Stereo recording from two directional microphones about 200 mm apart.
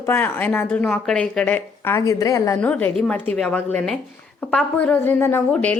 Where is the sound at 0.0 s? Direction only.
10° left (ahead or behind).